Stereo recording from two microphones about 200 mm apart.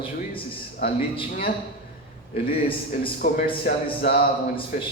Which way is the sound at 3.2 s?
45° left (ahead or behind).